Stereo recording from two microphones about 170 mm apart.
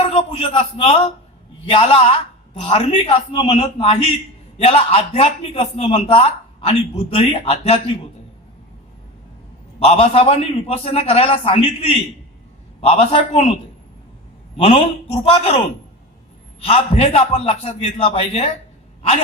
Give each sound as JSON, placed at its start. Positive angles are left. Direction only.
{"t": 0.0, "sound": "a man's voice", "side_deg": 35}
{"t": 9.8, "sound": "a man's voice", "side_deg": 35}
{"t": 14.5, "sound": "a man's voice", "side_deg": 35}